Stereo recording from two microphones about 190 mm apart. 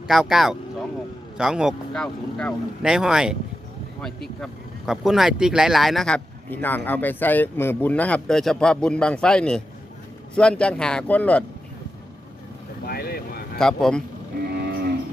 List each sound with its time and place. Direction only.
0.1 s speech: centre (ahead or behind)
12.8 s a sound: 55° left (ahead or behind)
13.6 s speech: 5° left (ahead or behind)
14.5 s cattle: 60° right (ahead or behind)